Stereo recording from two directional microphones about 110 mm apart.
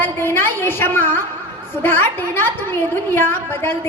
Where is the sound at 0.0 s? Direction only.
20° left (ahead or behind).